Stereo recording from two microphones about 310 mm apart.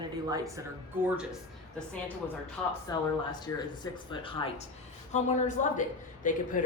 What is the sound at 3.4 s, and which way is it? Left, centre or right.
Speech, centre.